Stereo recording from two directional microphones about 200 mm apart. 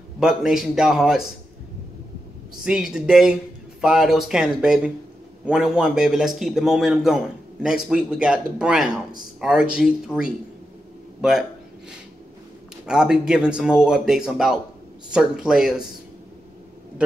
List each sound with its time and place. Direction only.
0.2 s a man's voice: centre (ahead or behind)
2.6 s a man's voice: 5° right (ahead or behind)
12.8 s a man's voice: 5° right (ahead or behind)